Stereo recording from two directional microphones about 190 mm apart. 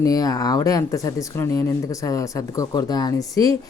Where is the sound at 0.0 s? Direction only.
20° left (ahead or behind).